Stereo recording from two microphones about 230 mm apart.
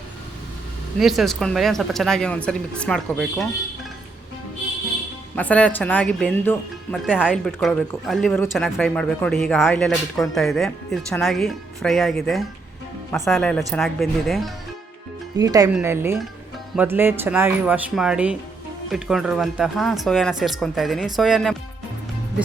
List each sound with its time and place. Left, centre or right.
0.9 s speech: centre
5.4 s speech: centre
15.4 s speech: centre